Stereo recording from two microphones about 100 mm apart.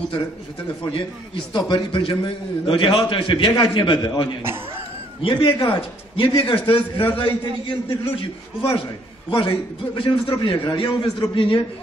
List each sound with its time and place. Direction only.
0.8 s a man's voice: 50° left (ahead or behind)
4.4 s speech: 20° right (ahead or behind)
5.2 s a man's voice: 60° left (ahead or behind)
9.3 s a man's voice: 55° left (ahead or behind)